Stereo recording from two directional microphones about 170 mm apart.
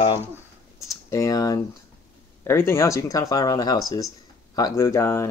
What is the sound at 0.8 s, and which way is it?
Speech, 20° left (ahead or behind).